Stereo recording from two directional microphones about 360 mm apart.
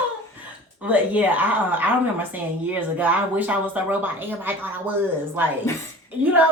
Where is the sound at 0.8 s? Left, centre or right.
Centre.